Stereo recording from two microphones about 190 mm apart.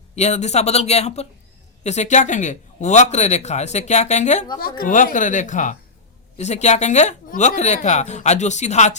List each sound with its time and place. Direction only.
0.2 s speech: 35° left (ahead or behind)